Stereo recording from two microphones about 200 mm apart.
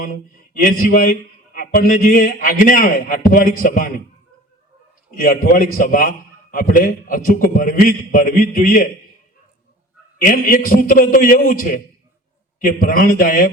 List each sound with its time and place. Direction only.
0.6 s a man's voice: 45° left (ahead or behind)
5.1 s a man's voice: 45° left (ahead or behind)
10.2 s a man's voice: 40° left (ahead or behind)